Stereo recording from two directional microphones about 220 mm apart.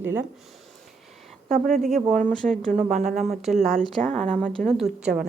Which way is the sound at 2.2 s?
5° left (ahead or behind).